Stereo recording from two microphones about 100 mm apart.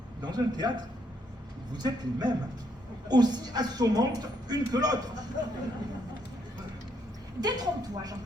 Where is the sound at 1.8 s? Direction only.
40° right (ahead or behind).